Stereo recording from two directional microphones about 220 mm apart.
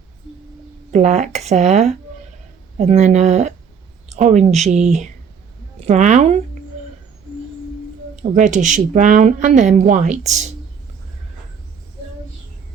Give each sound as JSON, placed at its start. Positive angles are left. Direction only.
{"t": 0.9, "sound": "a woman's voice", "side_deg": -30}
{"t": 8.1, "sound": "a woman's voice", "side_deg": -35}